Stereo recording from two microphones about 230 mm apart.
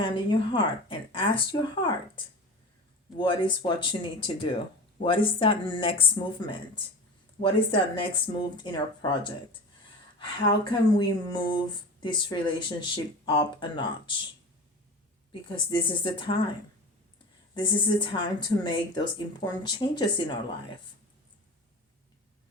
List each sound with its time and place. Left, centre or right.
0.0 s speech: left
3.2 s speech: left
15.3 s speech: left